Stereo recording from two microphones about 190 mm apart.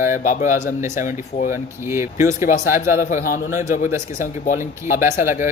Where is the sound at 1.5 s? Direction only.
15° right (ahead or behind).